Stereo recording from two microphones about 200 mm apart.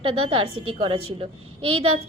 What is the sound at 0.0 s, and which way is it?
A woman's voice, 25° right (ahead or behind).